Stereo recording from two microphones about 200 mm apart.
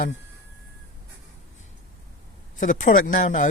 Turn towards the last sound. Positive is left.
turn(degrees=40)  # may be behind; listen again after turning